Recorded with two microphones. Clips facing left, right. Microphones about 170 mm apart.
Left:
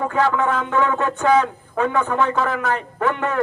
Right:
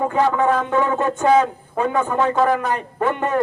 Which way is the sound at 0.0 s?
15° right (ahead or behind).